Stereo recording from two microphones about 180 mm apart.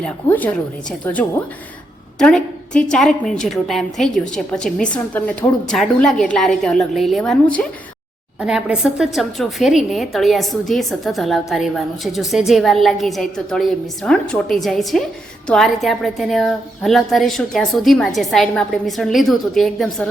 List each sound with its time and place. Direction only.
0.0 s a woman's voice: 10° left (ahead or behind)